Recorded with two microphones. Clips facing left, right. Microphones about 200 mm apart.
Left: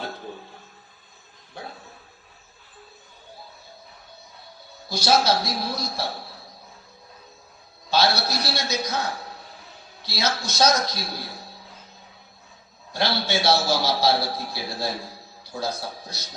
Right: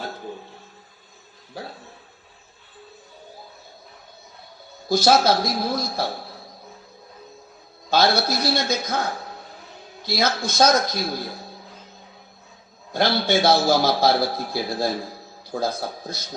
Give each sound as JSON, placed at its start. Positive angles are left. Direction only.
{"t": 4.9, "sound": "a man's voice", "side_deg": -50}
{"t": 7.9, "sound": "a man's voice", "side_deg": -50}
{"t": 12.9, "sound": "a man's voice", "side_deg": -50}